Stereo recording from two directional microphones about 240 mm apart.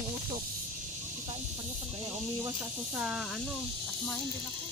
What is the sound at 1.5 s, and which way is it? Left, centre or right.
Speech, right.